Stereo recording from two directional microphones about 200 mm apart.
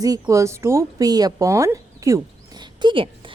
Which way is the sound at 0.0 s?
15° right (ahead or behind).